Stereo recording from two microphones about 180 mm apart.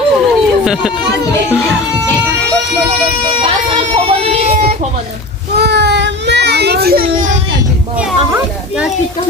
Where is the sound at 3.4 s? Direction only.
30° right (ahead or behind).